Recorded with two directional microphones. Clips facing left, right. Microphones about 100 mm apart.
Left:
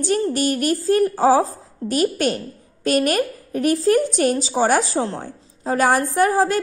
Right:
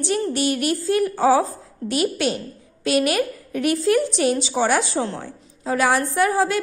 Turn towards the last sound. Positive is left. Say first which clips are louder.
# left 2 dB
turn(degrees=40)  # may be behind; listen again after turning